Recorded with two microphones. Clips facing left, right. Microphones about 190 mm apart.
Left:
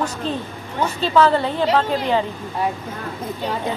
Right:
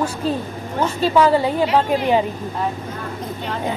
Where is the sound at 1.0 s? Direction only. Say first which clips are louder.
Right 1 dB; 10° right (ahead or behind).